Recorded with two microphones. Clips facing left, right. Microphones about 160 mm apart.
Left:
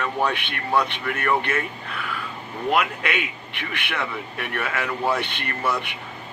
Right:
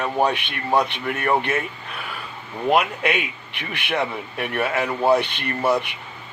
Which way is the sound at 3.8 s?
25° right (ahead or behind).